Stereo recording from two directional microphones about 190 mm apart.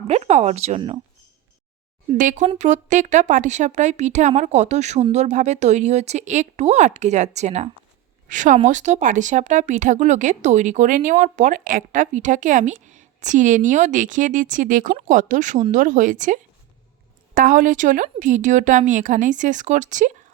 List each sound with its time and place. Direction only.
0.1 s speech: 35° right (ahead or behind)
2.0 s speech: 40° right (ahead or behind)